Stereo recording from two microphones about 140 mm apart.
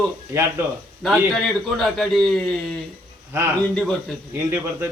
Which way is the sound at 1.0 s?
Centre (ahead or behind).